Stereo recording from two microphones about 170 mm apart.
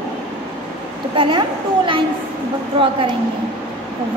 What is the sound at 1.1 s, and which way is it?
Speech, 30° right (ahead or behind).